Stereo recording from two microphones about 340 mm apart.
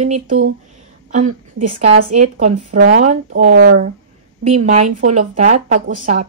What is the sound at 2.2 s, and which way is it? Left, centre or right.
Speech, right.